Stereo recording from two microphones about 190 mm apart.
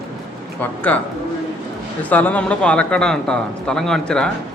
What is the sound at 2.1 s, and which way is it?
Speech, 10° left (ahead or behind).